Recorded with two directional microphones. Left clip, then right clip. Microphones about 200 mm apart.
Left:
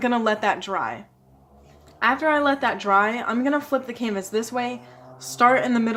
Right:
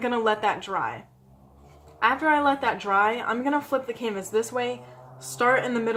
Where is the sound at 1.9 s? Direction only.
40° left (ahead or behind).